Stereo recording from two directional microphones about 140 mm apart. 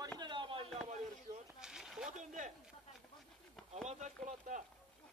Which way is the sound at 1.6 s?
5° right (ahead or behind).